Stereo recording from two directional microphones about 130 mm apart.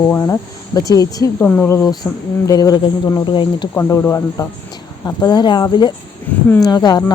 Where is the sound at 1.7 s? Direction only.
30° left (ahead or behind).